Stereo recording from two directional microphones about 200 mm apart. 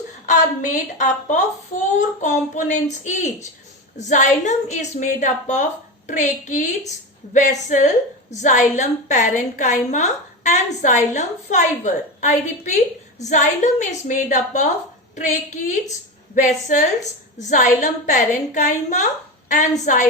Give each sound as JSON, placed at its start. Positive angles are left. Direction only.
{"t": 0.3, "sound": "a woman's voice", "side_deg": 40}